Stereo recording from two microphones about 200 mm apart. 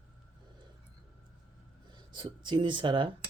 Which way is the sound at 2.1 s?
25° right (ahead or behind).